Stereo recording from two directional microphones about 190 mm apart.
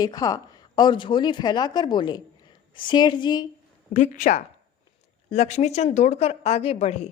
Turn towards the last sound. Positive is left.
turn(degrees=35)  # may be behind; listen again after turning